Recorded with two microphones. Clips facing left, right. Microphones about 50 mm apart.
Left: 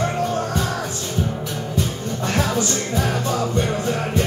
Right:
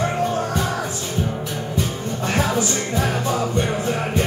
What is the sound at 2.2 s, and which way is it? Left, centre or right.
Music, centre.